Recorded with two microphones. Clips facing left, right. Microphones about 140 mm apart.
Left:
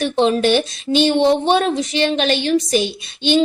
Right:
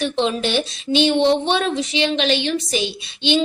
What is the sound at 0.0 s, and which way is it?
A woman's voice, 45° left (ahead or behind).